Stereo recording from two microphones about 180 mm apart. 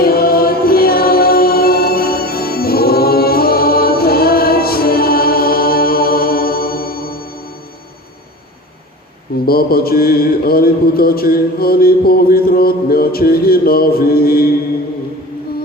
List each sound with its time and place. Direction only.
0.0 s music: 55° left (ahead or behind)
9.5 s mantra: 55° left (ahead or behind)